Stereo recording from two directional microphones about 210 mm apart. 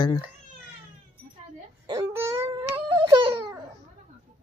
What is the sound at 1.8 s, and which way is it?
Wail, 15° right (ahead or behind).